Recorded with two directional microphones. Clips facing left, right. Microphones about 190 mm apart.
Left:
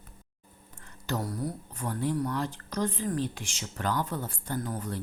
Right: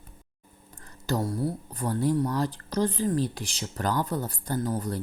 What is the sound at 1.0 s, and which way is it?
Speech, 30° right (ahead or behind).